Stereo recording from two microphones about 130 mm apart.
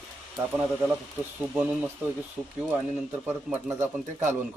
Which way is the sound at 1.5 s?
10° right (ahead or behind).